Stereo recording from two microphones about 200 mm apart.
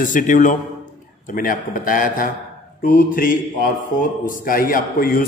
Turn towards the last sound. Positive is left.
turn(degrees=45)  # may be behind; listen again after turning